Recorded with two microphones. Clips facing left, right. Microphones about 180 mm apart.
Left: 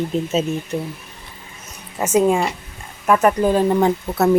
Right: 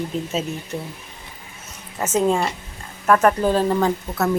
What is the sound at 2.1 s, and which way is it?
Speech, 10° left (ahead or behind).